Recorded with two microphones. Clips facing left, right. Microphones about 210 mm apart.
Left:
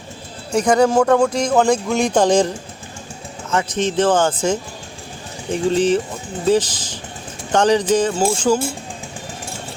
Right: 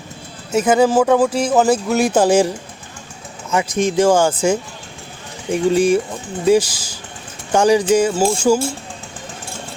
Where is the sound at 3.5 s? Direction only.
10° right (ahead or behind).